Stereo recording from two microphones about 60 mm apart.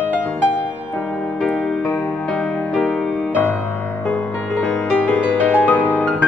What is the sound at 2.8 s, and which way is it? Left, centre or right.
Music, centre.